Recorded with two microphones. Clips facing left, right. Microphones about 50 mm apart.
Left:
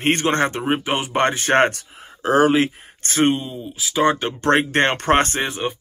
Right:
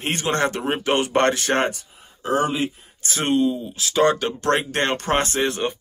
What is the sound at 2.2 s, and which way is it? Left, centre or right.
Speech, left.